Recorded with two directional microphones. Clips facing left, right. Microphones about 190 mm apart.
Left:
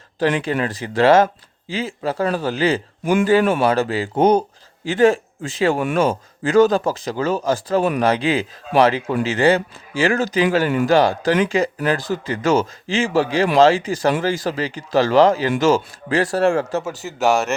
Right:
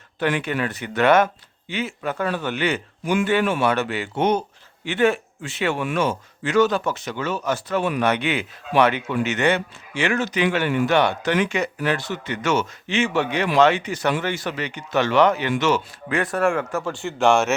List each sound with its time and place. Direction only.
0.2 s speech: 30° left (ahead or behind)
16.8 s a man's voice: 5° left (ahead or behind)